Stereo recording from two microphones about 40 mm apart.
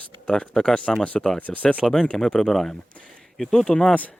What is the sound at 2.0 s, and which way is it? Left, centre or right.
Speech, left.